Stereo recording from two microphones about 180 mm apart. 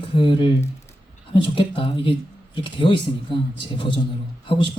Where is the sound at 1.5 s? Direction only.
30° left (ahead or behind).